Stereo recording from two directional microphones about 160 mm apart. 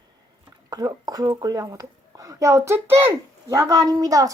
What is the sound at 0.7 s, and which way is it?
A woman's voice, 25° right (ahead or behind).